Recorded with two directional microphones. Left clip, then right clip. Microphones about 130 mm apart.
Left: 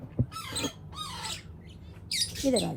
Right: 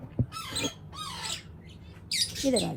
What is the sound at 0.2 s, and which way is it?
Rodents, 55° left (ahead or behind).